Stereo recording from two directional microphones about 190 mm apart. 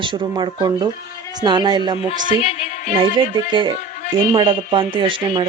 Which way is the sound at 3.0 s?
25° right (ahead or behind).